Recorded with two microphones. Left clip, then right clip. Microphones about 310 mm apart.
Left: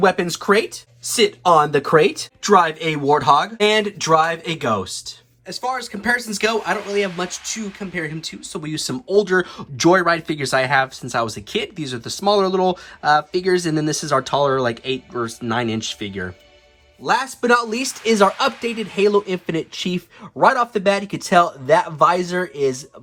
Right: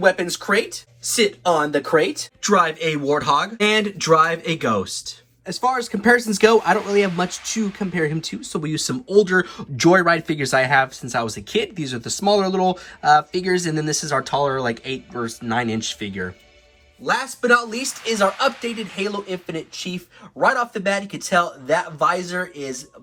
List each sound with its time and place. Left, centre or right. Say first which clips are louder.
0.0 s speech: left 1 dB; left
2.4 s speech: left 3 dB; centre
20.4 s speech: left 3 dB; centre